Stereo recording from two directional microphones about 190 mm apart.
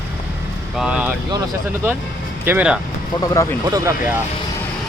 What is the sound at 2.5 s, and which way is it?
Speech, 5° right (ahead or behind).